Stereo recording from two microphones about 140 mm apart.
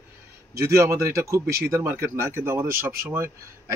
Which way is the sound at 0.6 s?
20° right (ahead or behind).